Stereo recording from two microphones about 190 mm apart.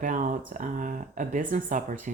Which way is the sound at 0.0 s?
45° right (ahead or behind).